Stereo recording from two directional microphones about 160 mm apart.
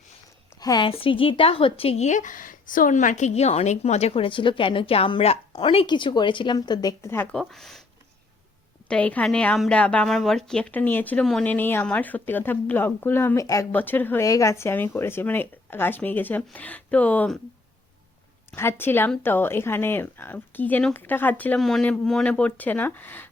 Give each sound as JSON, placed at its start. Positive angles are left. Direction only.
{"t": 0.6, "sound": "a woman's voice", "side_deg": 25}
{"t": 7.3, "sound": "speech", "side_deg": 0}
{"t": 8.9, "sound": "a woman's voice", "side_deg": 10}
{"t": 18.5, "sound": "a woman's voice", "side_deg": 15}